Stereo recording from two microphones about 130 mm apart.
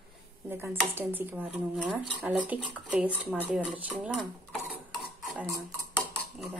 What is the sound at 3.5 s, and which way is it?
Speech, 10° right (ahead or behind).